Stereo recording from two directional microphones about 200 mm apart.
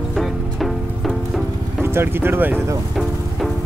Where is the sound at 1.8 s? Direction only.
10° right (ahead or behind).